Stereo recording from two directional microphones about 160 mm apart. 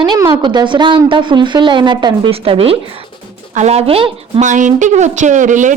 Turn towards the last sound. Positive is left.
turn(degrees=-50)  # may be behind; listen again after turning